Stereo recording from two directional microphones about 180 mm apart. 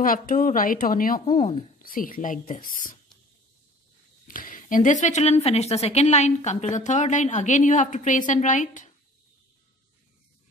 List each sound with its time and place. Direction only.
0.0 s a woman's voice: 50° left (ahead or behind)
4.3 s a woman's voice: 50° left (ahead or behind)